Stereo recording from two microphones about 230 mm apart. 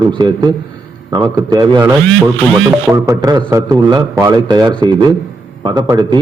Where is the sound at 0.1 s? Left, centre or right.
Centre.